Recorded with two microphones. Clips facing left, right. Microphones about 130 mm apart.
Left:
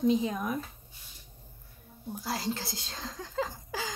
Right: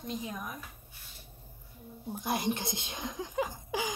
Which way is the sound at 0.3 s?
90° left.